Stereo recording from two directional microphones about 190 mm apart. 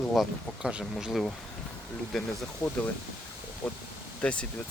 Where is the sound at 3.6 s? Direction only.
5° left (ahead or behind).